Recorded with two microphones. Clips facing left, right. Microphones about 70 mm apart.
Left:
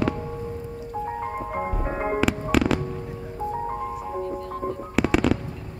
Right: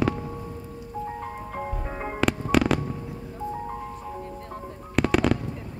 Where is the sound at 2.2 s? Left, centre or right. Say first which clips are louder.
Right 2 dB; centre.